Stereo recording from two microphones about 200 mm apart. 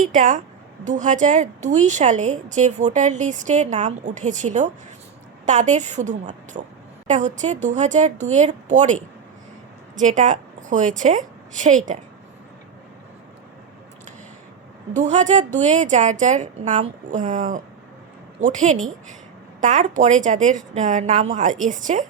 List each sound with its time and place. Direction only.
0.1 s a woman's voice: 40° right (ahead or behind)
14.9 s a woman's voice: 35° right (ahead or behind)